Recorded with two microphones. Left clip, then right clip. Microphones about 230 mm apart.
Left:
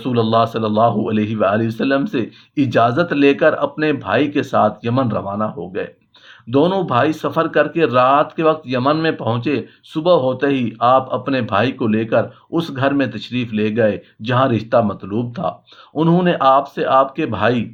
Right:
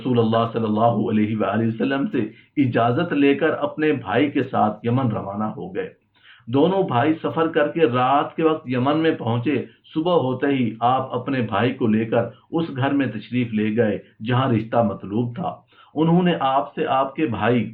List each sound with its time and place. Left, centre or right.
0.0 s speech: left